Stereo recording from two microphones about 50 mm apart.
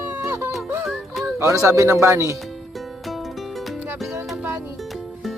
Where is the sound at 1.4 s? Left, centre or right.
Right.